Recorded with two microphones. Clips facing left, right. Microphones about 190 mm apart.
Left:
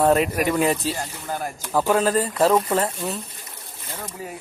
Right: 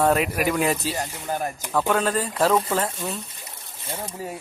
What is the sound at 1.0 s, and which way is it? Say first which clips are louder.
Speech: right 2 dB; 15° right (ahead or behind).